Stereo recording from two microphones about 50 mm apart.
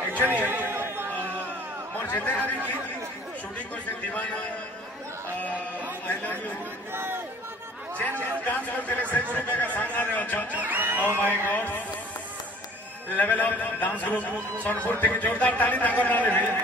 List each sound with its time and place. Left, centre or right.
0.1 s chatter: right
2.0 s a man's voice: left
3.5 s speech: left
6.9 s speech: right
8.2 s a man's voice: left
10.5 s speech: right
11.5 s a man's voice: left
13.1 s a man's voice: left